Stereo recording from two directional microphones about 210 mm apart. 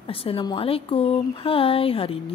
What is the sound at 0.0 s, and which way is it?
Speech, 25° left (ahead or behind).